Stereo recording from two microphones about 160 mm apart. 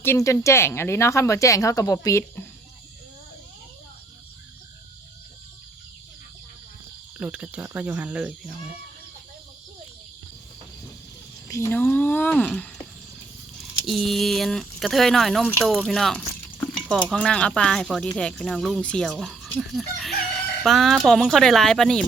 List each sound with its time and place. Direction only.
0.0 s speech: 15° left (ahead or behind)
7.2 s speech: 10° right (ahead or behind)
11.4 s speech: 20° left (ahead or behind)
13.8 s speech: centre (ahead or behind)